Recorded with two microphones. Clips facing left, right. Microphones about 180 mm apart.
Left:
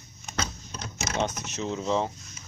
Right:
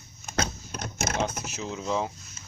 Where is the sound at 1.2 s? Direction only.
5° right (ahead or behind).